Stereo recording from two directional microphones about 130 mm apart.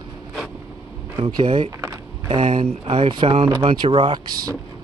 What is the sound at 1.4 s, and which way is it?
Speech, 40° right (ahead or behind).